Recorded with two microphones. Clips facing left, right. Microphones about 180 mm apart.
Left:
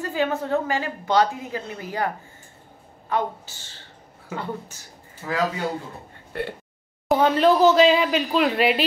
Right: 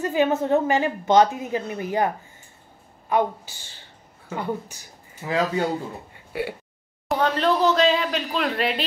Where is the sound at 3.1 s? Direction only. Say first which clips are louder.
Right 3 dB; 15° right (ahead or behind).